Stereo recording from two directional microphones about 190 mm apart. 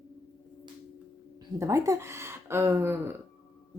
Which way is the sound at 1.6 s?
15° right (ahead or behind).